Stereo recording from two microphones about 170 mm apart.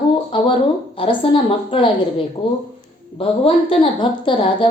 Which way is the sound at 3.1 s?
35° left (ahead or behind).